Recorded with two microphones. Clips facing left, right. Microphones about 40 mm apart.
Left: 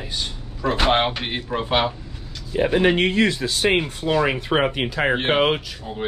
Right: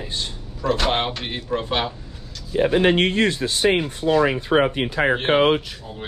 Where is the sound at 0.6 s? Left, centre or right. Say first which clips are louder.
Left 2 dB; centre.